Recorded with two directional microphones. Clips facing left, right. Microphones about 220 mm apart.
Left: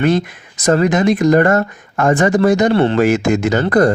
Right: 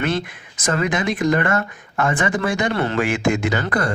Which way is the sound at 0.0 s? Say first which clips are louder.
Left 8 dB; 40° left (ahead or behind).